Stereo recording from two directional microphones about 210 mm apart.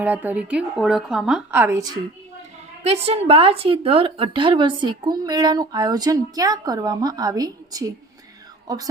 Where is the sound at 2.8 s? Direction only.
30° right (ahead or behind).